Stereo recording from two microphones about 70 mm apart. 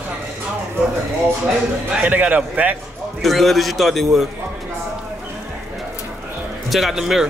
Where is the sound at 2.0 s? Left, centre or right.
Right.